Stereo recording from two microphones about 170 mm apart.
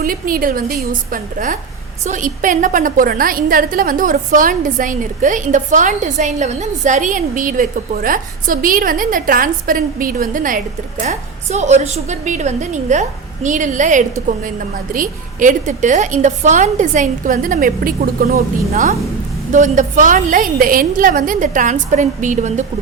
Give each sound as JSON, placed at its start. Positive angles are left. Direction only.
{"t": 0.0, "sound": "a woman's voice", "side_deg": -55}
{"t": 19.5, "sound": "a woman's voice", "side_deg": -45}